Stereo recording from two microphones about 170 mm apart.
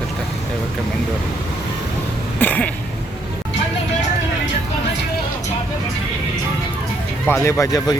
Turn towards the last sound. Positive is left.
turn(degrees=20)  # may be behind; listen again after turning